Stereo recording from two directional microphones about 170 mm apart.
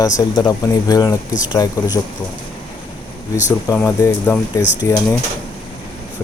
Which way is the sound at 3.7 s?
15° left (ahead or behind).